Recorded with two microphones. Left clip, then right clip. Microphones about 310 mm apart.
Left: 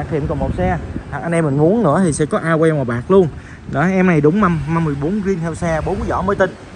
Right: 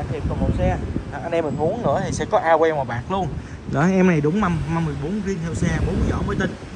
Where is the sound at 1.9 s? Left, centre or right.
Right.